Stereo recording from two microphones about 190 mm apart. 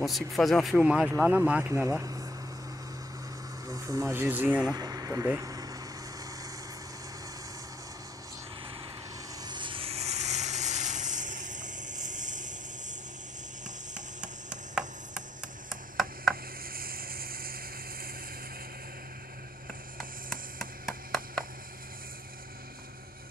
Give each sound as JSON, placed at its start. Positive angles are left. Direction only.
{"t": 0.0, "sound": "speech", "side_deg": 0}
{"t": 3.6, "sound": "speech", "side_deg": -20}
{"t": 4.7, "sound": "vehicle", "side_deg": -20}
{"t": 9.4, "sound": "a sound", "side_deg": -25}
{"t": 14.2, "sound": "a sound", "side_deg": -5}
{"t": 16.7, "sound": "vehicle", "side_deg": -50}
{"t": 20.5, "sound": "chop", "side_deg": 0}